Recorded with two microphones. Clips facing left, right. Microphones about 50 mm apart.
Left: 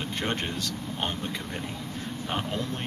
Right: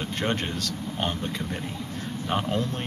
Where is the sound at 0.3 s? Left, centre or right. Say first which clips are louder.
Right 2 dB; left.